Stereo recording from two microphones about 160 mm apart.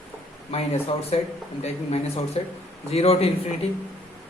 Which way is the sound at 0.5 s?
40° left (ahead or behind).